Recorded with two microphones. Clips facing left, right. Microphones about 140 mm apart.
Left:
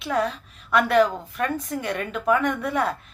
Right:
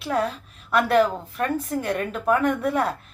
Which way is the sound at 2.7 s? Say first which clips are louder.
Right 1 dB; 35° right (ahead or behind).